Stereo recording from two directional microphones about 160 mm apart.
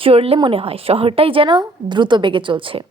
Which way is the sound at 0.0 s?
35° right (ahead or behind).